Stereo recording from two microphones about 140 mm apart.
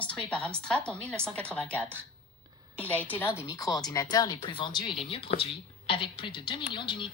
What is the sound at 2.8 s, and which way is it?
Speech, 10° left (ahead or behind).